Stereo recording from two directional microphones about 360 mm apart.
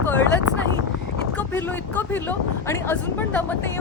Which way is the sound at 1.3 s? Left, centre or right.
Centre.